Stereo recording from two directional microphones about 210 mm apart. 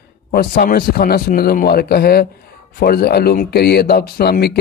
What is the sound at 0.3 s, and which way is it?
Speech, 45° left (ahead or behind).